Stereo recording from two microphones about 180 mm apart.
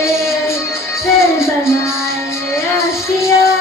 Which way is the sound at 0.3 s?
15° left (ahead or behind).